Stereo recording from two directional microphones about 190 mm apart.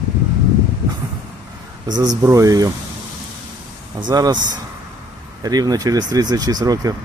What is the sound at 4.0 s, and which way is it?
Speech, 20° right (ahead or behind).